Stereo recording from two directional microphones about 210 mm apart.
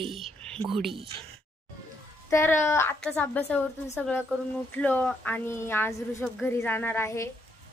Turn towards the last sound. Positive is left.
turn(degrees=15)  # may be behind; listen again after turning